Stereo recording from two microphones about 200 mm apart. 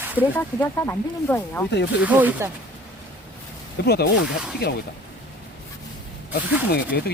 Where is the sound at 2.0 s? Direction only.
10° right (ahead or behind).